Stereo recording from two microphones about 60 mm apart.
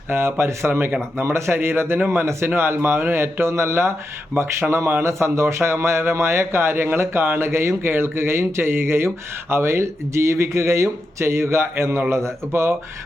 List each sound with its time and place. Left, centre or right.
0.1 s speech: right
0.7 s speech: right
1.2 s speech: right